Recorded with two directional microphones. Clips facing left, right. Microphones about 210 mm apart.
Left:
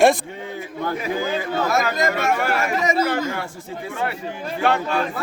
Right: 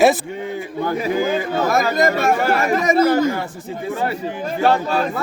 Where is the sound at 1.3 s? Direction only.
50° right (ahead or behind).